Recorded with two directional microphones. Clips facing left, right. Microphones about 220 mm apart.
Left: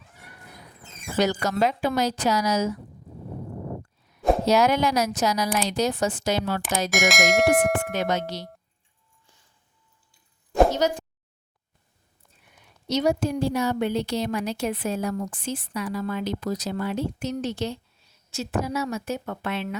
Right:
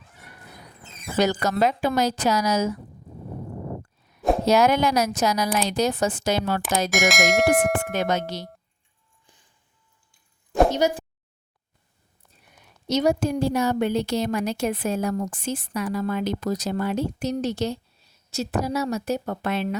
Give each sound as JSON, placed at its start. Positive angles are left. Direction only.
{"t": 1.2, "sound": "a woman's voice", "side_deg": -50}
{"t": 4.4, "sound": "a woman's voice", "side_deg": -50}
{"t": 6.9, "sound": "bell", "side_deg": 0}
{"t": 7.9, "sound": "a woman's voice", "side_deg": -50}
{"t": 9.2, "sound": "music", "side_deg": -15}
{"t": 10.7, "sound": "speech", "side_deg": -10}
{"t": 12.9, "sound": "a woman's voice", "side_deg": -45}